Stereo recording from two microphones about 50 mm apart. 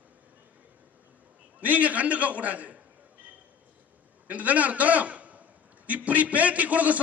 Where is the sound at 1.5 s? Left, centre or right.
Right.